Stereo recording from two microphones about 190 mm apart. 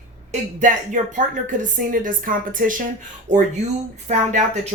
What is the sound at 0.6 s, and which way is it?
Speech, 40° right (ahead or behind).